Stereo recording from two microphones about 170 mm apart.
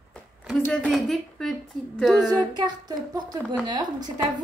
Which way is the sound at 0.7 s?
Centre (ahead or behind).